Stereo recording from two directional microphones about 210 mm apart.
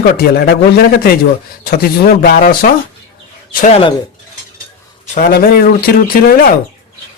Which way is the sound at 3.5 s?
30° left (ahead or behind).